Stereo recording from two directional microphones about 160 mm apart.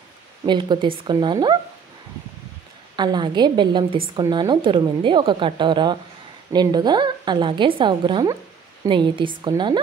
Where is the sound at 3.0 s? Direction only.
25° right (ahead or behind).